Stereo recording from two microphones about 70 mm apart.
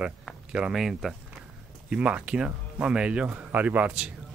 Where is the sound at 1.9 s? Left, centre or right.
Centre.